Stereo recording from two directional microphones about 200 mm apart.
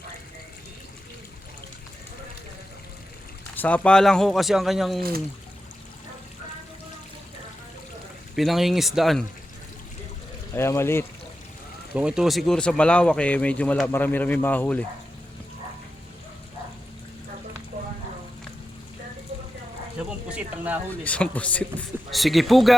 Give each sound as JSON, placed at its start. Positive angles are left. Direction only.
{"t": 3.5, "sound": "speech", "side_deg": 10}
{"t": 8.4, "sound": "speech", "side_deg": 0}
{"t": 10.5, "sound": "speech", "side_deg": 15}
{"t": 11.9, "sound": "speech", "side_deg": -5}
{"t": 17.7, "sound": "a sound", "side_deg": -40}
{"t": 20.1, "sound": "a sound", "side_deg": -5}
{"t": 21.0, "sound": "speech", "side_deg": 5}